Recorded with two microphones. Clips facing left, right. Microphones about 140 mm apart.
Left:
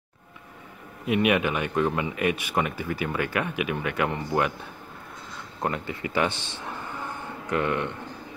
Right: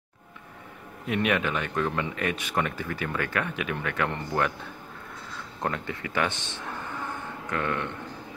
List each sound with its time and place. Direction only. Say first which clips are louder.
1.0 s a man's voice: left 3 dB; 10° left (ahead or behind)
5.6 s a man's voice: left 2 dB; 10° left (ahead or behind)
7.5 s a man's voice: left 4 dB; 15° left (ahead or behind)